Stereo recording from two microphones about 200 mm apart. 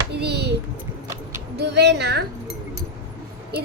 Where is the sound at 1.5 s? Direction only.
60° right (ahead or behind).